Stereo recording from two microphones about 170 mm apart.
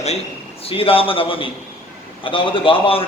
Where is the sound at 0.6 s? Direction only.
35° left (ahead or behind).